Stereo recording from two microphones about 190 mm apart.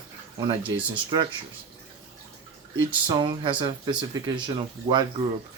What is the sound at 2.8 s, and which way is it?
Speech, 25° right (ahead or behind).